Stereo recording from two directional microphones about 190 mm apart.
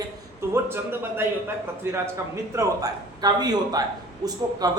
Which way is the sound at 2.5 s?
20° right (ahead or behind).